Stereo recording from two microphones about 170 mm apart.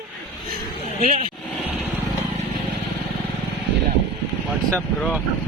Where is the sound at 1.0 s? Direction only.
50° right (ahead or behind).